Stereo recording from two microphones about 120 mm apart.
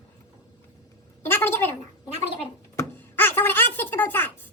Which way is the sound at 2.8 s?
20° left (ahead or behind).